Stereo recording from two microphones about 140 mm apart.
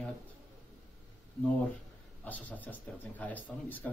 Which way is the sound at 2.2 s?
10° left (ahead or behind).